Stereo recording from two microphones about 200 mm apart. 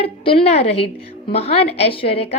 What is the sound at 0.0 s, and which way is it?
A woman's voice, 30° left (ahead or behind).